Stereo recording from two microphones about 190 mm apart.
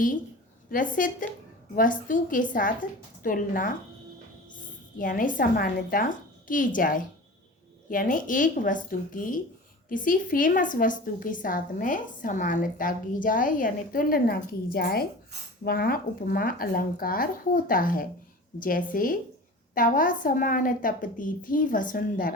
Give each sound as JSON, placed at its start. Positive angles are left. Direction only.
{"t": 0.7, "sound": "a woman's voice", "side_deg": 45}
{"t": 4.9, "sound": "a woman's voice", "side_deg": 45}